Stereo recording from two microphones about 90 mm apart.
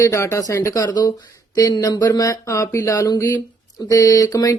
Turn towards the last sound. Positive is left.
turn(degrees=40)  # may be behind; listen again after turning